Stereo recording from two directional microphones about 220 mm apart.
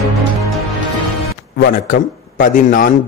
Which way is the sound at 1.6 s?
40° left (ahead or behind).